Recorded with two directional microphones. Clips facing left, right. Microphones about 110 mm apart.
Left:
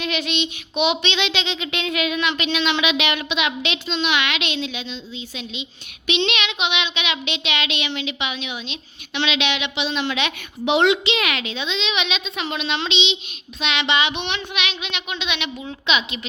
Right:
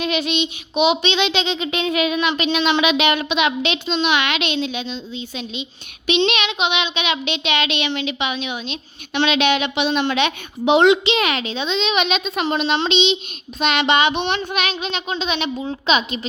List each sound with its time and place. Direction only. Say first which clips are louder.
0.8 s child singing: right 4 dB; 35° right (ahead or behind)
1.8 s speech: right 4 dB; 30° right (ahead or behind)
2.4 s child singing: right 6 dB; 45° right (ahead or behind)